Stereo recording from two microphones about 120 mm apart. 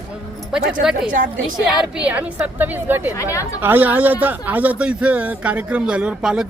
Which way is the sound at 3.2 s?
25° left (ahead or behind).